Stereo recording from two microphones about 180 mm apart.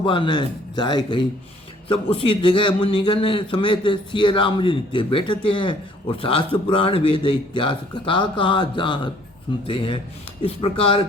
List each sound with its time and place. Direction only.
0.0 s a man's voice: 25° left (ahead or behind)